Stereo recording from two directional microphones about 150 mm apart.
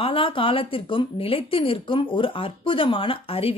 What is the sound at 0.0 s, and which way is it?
Speech, 35° left (ahead or behind).